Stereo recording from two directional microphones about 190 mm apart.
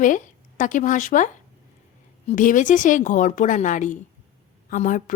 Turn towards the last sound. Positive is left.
turn(degrees=40)  # may be behind; listen again after turning